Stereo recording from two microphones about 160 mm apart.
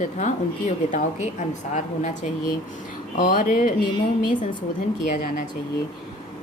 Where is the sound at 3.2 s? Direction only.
55° left (ahead or behind).